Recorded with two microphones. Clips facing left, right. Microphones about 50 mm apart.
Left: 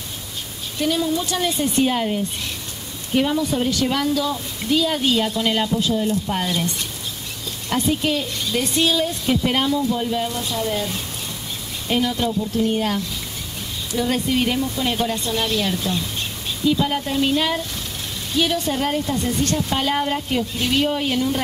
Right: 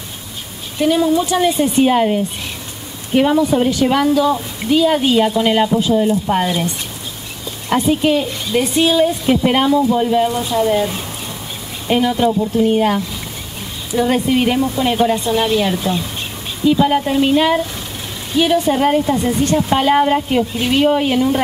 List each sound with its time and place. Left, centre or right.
0.7 s a woman's voice: centre
7.7 s a woman's voice: centre